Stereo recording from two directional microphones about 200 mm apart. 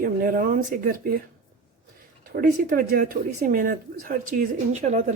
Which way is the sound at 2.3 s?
45° right (ahead or behind).